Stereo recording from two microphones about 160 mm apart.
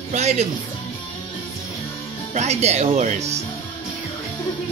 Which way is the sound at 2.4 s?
45° right (ahead or behind).